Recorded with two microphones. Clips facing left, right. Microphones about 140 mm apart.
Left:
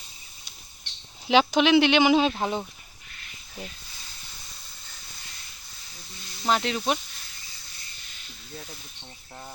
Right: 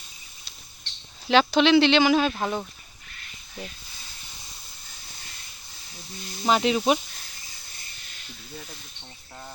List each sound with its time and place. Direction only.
1.3 s speech: 15° left (ahead or behind)
6.4 s speech: 10° right (ahead or behind)